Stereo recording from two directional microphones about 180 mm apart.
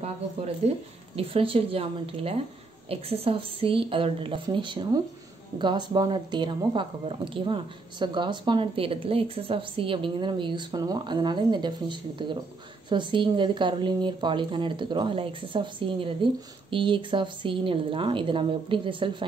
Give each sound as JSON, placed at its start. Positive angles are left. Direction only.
{"t": 0.7, "sound": "speech", "side_deg": -30}